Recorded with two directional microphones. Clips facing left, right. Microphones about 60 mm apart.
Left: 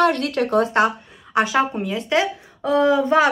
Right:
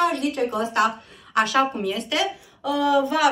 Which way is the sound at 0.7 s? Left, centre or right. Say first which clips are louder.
Left 3 dB; left.